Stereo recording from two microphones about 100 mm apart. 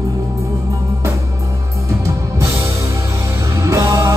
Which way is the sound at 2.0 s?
30° right (ahead or behind).